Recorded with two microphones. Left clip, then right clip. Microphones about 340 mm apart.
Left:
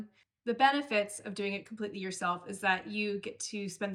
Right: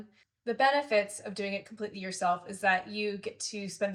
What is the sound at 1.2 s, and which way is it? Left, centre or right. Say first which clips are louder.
Speech: right 1 dB; centre.